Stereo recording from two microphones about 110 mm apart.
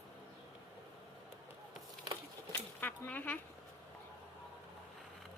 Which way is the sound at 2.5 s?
15° left (ahead or behind).